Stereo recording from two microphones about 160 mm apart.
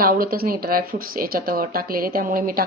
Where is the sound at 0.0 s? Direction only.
65° right (ahead or behind).